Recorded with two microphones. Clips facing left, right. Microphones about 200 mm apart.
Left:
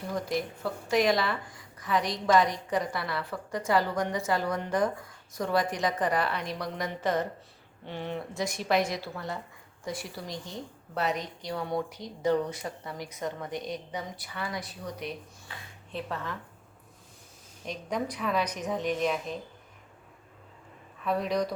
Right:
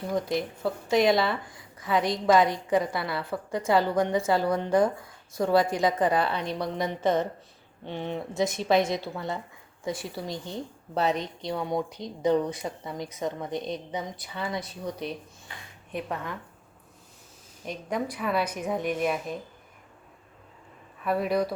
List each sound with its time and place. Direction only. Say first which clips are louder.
0.6 s speech: right 4 dB; 25° right (ahead or behind)
15.9 s a woman's voice: right 2 dB; 15° right (ahead or behind)
17.7 s a woman's voice: right 2 dB; 5° right (ahead or behind)
21.0 s a woman's voice: right 3 dB; 5° right (ahead or behind)